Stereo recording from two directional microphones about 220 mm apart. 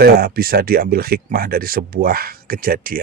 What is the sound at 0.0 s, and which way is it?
Speech, 40° right (ahead or behind).